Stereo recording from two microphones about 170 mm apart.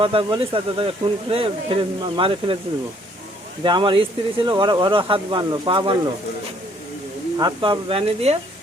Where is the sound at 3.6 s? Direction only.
25° right (ahead or behind).